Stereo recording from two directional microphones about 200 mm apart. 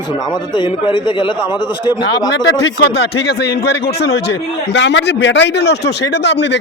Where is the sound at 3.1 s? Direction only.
55° left (ahead or behind).